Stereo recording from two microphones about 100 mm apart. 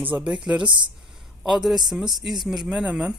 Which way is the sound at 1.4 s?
5° right (ahead or behind).